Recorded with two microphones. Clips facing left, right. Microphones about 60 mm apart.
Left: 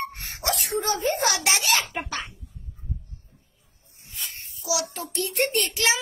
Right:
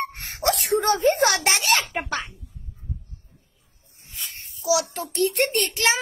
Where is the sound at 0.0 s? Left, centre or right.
Right.